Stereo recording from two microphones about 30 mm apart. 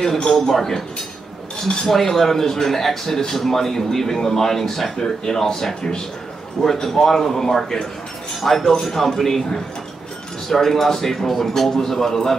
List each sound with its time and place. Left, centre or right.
0.3 s a man's voice: centre
1.9 s a man's voice: centre
5.0 s a man's voice: left
10.5 s a man's voice: centre